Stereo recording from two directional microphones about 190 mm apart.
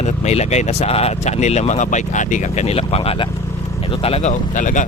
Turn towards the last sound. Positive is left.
turn(degrees=40)  # may be behind; listen again after turning